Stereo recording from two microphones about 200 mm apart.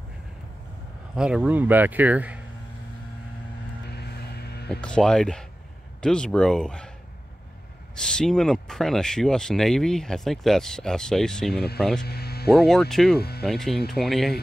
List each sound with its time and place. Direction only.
1.1 s speech: 5° right (ahead or behind)
3.9 s vehicle: 55° left (ahead or behind)
4.8 s speech: 5° left (ahead or behind)
7.9 s speech: 5° left (ahead or behind)
11.5 s speech: 50° left (ahead or behind)
12.0 s a sound: 50° left (ahead or behind)
12.5 s speech: 5° left (ahead or behind)